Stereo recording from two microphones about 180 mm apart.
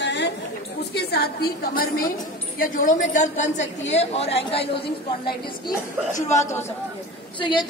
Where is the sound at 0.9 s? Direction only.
65° left (ahead or behind); by 4.8 s 30° left (ahead or behind).